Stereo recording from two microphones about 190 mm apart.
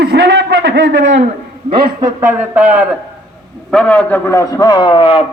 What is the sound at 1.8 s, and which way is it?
Speech, 15° right (ahead or behind).